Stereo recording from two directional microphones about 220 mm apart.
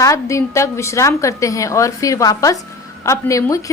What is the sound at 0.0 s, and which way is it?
A woman's voice, 15° left (ahead or behind).